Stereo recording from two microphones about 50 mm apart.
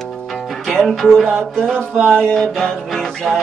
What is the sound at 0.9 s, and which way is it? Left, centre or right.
Music, centre.